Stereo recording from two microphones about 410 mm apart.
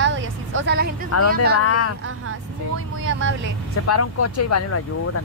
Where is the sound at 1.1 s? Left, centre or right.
Left.